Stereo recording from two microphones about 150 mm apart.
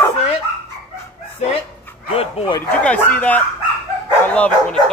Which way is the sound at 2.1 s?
40° left (ahead or behind).